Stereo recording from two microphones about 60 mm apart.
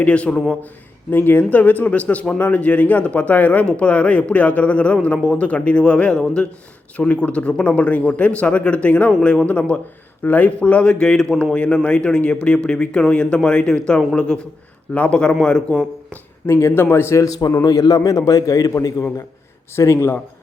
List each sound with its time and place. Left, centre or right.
0.0 s speech: centre
1.1 s speech: left; by 15.6 s centre
16.5 s a man's voice: left
17.6 s a man's voice: left
19.7 s a man's voice: left